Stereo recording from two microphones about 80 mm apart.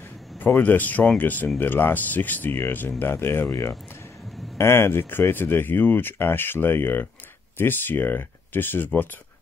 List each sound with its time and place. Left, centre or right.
0.4 s speech: left
4.6 s speech: left